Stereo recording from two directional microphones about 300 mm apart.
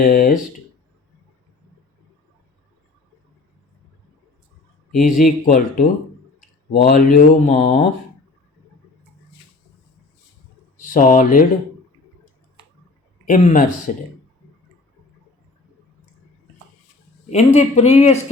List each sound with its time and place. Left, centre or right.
0.0 s speech: left
5.0 s speech: left
10.9 s speech: left
13.2 s speech: left
17.3 s speech: left